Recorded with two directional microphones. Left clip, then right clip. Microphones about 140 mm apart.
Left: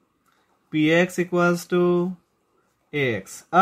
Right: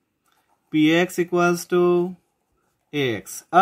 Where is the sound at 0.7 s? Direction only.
30° right (ahead or behind).